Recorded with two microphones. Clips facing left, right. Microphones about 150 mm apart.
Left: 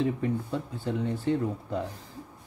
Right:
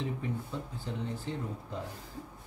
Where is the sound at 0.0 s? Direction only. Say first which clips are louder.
Left 8 dB; 60° left (ahead or behind).